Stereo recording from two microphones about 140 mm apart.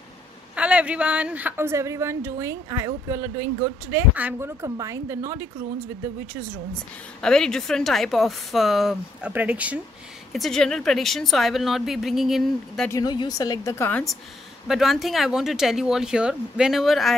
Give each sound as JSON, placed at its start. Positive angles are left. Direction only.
{"t": 0.6, "sound": "speech", "side_deg": -10}
{"t": 4.1, "sound": "speech", "side_deg": -10}
{"t": 7.2, "sound": "a woman's voice", "side_deg": 5}
{"t": 10.3, "sound": "a woman's voice", "side_deg": 0}
{"t": 12.9, "sound": "a woman's voice", "side_deg": 30}
{"t": 14.7, "sound": "a woman's voice", "side_deg": 0}